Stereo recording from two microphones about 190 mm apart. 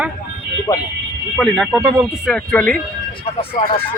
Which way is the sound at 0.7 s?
20° left (ahead or behind).